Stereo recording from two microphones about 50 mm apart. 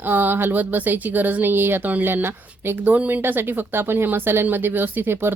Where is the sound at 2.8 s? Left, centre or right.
Right.